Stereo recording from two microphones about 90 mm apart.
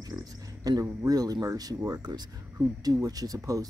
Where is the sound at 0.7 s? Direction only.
45° right (ahead or behind).